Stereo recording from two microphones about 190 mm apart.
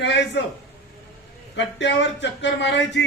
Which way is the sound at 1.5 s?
70° left (ahead or behind).